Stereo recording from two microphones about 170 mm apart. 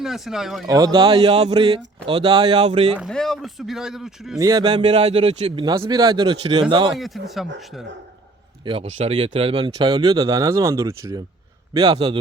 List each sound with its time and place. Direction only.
0.0 s speech: centre (ahead or behind)
0.7 s speech: 25° right (ahead or behind)
3.0 s speech: 5° left (ahead or behind)
4.4 s speech: 20° right (ahead or behind)
7.0 s speech: centre (ahead or behind)
8.6 s a man's voice: 30° right (ahead or behind)